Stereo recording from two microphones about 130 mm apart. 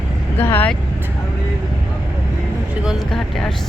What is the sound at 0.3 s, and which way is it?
Speech, 15° left (ahead or behind).